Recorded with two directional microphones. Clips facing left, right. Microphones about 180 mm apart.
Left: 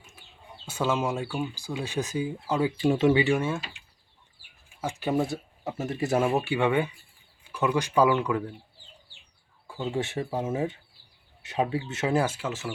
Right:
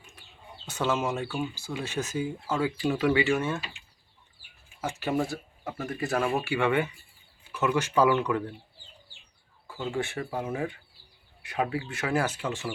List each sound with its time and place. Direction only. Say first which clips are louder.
0.1 s speech: even; 10° left (ahead or behind)
4.8 s speech: left 2 dB; 15° left (ahead or behind)
9.6 s speech: left 1 dB; 15° left (ahead or behind)
12.3 s speech: even; 5° left (ahead or behind)